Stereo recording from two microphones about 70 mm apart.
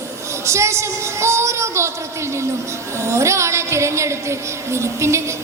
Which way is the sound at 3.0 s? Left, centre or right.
Right.